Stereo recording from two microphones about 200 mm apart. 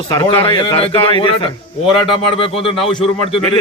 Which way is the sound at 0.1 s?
25° left (ahead or behind).